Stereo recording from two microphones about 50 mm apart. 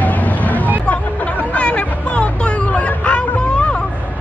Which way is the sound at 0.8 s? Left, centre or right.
Left.